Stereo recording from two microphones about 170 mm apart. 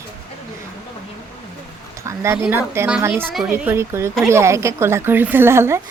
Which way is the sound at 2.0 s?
15° right (ahead or behind).